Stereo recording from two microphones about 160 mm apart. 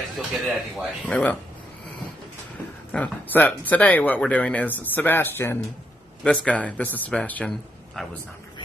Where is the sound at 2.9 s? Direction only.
10° left (ahead or behind).